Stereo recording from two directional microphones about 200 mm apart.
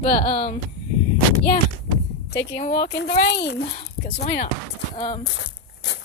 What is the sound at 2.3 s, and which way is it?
Speech, 60° left (ahead or behind).